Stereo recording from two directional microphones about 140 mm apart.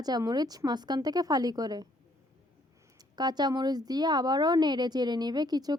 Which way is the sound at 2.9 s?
30° right (ahead or behind).